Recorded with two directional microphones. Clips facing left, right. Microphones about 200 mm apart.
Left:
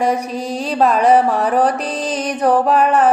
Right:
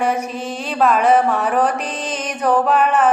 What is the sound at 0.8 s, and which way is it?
Mantra, 35° left (ahead or behind).